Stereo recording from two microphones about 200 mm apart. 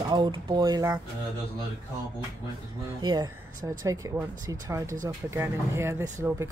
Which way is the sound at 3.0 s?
20° right (ahead or behind).